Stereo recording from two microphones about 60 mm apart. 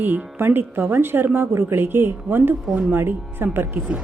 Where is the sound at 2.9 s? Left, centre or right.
Right.